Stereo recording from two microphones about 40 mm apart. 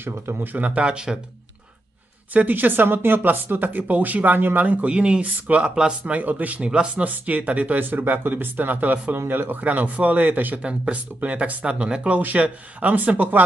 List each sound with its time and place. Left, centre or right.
0.0 s speech: right
0.7 s speech: right
2.3 s speech: right
4.9 s speech: right
6.1 s speech: right
7.0 s speech: right
7.9 s speech: right
9.1 s speech: right
9.6 s speech: right
10.2 s speech: right
10.6 s speech: right
11.6 s speech: right
12.2 s speech: right